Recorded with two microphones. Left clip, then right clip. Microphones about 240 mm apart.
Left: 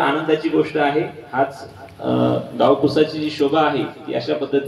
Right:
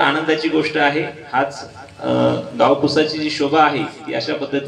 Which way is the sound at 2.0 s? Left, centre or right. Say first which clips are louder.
Right 2 dB; right.